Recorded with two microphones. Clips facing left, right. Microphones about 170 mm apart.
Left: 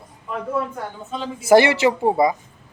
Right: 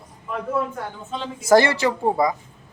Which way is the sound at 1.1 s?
5° left (ahead or behind).